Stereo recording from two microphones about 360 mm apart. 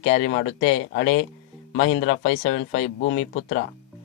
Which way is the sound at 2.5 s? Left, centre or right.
Left.